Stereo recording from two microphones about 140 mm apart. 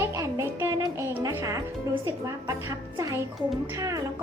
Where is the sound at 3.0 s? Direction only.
25° right (ahead or behind).